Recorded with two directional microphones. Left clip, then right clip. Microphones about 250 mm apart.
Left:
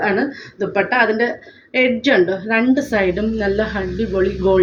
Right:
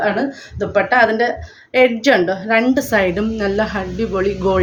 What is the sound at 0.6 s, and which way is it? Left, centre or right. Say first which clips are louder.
A woman's voice: right 3 dB; right.